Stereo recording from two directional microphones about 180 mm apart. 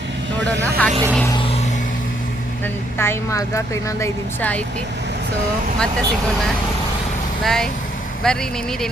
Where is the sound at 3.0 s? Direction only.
15° left (ahead or behind).